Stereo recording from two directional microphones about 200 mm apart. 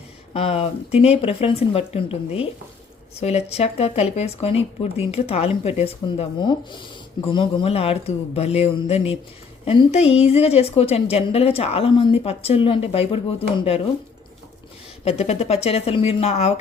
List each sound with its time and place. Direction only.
0.3 s speech: 30° left (ahead or behind)
15.0 s speech: 30° left (ahead or behind)